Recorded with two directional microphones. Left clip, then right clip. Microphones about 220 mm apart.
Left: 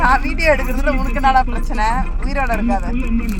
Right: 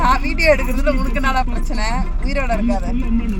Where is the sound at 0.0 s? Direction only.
10° right (ahead or behind).